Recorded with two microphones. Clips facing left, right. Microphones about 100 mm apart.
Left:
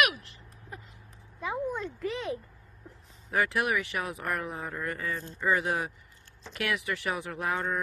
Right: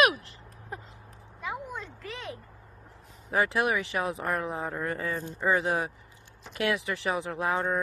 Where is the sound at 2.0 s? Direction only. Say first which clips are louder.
Left 7 dB; 20° left (ahead or behind).